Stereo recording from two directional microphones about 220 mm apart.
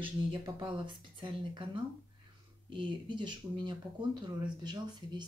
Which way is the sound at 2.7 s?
20° right (ahead or behind).